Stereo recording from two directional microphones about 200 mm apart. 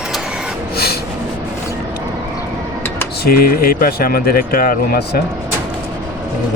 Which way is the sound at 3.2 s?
50° left (ahead or behind).